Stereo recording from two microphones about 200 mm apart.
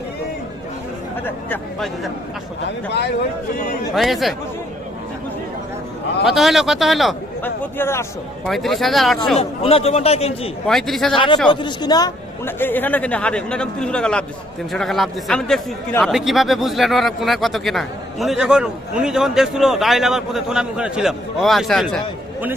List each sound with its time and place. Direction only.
1.2 s a woman's voice: 10° left (ahead or behind)
2.6 s a man's voice: 55° left (ahead or behind)
3.9 s speech: centre (ahead or behind)
6.2 s speech: centre (ahead or behind)
8.4 s speech: centre (ahead or behind)
9.4 s a man's voice: 30° left (ahead or behind)
10.7 s speech: centre (ahead or behind)
11.1 s a woman's voice: 25° left (ahead or behind); by 22.0 s centre (ahead or behind)